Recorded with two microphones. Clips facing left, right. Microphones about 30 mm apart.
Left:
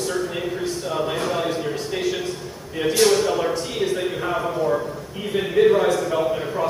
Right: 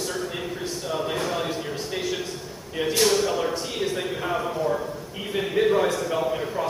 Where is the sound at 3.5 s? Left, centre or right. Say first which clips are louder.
Left 4 dB; centre.